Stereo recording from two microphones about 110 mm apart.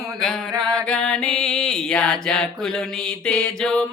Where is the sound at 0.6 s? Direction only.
10° left (ahead or behind).